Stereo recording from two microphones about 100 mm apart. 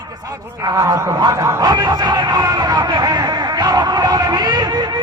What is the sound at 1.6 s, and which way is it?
Speech, 45° right (ahead or behind).